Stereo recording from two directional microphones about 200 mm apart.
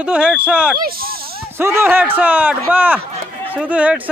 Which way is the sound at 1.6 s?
10° right (ahead or behind).